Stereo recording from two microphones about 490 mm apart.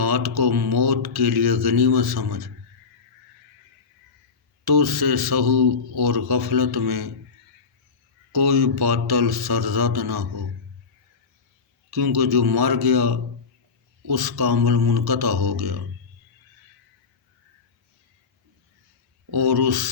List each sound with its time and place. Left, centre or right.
0.0 s speech: right
4.6 s speech: right
8.3 s speech: right
11.9 s speech: right
19.3 s speech: right